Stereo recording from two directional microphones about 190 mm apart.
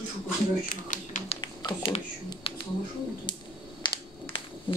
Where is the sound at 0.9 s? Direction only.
40° left (ahead or behind).